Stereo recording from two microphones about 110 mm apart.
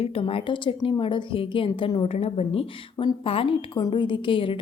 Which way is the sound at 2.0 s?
65° left (ahead or behind).